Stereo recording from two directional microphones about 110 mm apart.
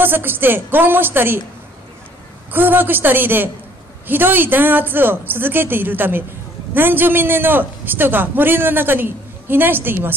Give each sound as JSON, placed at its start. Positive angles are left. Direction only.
{"t": 0.0, "sound": "a man's voice", "side_deg": -20}
{"t": 2.5, "sound": "a woman's voice", "side_deg": -20}